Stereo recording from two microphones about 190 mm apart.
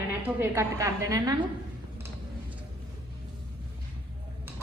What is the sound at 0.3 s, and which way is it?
A woman's voice, 15° right (ahead or behind).